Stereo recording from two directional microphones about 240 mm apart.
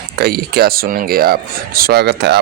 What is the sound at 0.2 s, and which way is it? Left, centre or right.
Speech, right.